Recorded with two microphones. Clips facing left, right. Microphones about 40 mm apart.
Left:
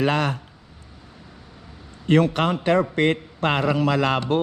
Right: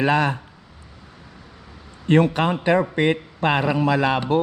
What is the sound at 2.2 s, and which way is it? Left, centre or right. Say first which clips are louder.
A man's voice: right 1 dB; right.